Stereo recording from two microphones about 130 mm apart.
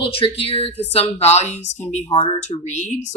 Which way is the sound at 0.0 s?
45° left (ahead or behind).